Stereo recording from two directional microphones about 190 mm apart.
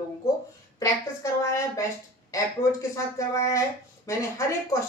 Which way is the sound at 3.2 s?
15° left (ahead or behind).